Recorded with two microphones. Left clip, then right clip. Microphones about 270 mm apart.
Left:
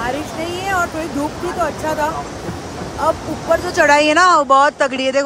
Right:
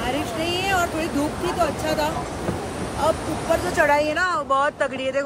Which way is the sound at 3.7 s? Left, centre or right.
Left.